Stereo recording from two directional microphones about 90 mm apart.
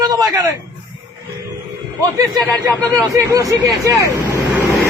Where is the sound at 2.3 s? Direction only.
40° right (ahead or behind).